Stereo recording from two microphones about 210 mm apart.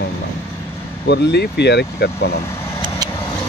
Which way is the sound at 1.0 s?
55° left (ahead or behind).